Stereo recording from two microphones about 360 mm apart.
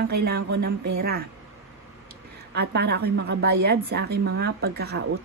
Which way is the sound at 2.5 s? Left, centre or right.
Right.